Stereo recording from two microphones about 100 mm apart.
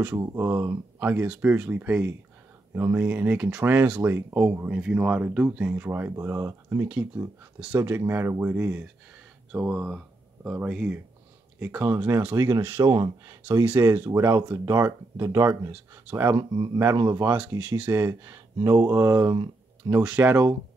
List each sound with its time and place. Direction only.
0.2 s speech: 25° right (ahead or behind)
4.6 s speech: 15° right (ahead or behind); by 6.9 s 30° right (ahead or behind)
6.9 s speech: 15° right (ahead or behind)
7.8 s speech: 25° right (ahead or behind)
12.4 s speech: 35° right (ahead or behind)
13.7 s speech: 25° right (ahead or behind)
15.7 s speech: 20° right (ahead or behind)
16.3 s speech: 50° right (ahead or behind)
16.7 s speech: 30° right (ahead or behind)
17.6 s speech: 15° right (ahead or behind)
17.9 s speech: 30° right (ahead or behind)
20.0 s speech: 15° right (ahead or behind)